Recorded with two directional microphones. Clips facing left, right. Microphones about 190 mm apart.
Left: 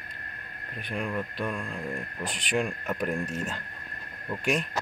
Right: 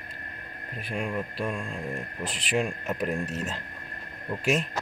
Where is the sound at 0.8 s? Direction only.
10° right (ahead or behind).